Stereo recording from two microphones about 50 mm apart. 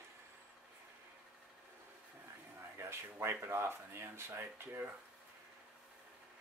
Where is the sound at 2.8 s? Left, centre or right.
Right.